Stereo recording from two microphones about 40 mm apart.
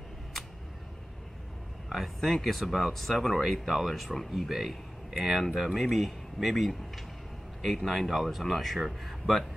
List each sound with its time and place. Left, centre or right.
2.1 s speech: centre
2.4 s speech: centre